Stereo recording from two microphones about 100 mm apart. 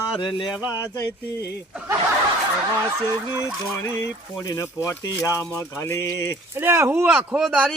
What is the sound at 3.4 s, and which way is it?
Speech, 30° left (ahead or behind).